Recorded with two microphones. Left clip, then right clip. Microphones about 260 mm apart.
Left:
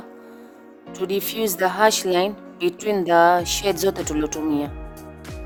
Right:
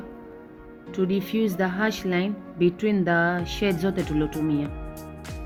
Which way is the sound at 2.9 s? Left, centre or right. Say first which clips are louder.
Left 12 dB; left.